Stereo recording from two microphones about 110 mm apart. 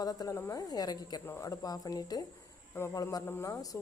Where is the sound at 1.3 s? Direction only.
25° left (ahead or behind).